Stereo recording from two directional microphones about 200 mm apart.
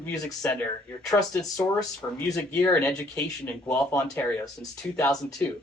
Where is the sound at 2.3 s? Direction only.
15° left (ahead or behind).